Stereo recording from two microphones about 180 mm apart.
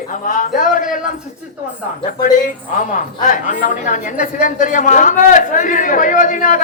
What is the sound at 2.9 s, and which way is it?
A woman's voice, 45° left (ahead or behind).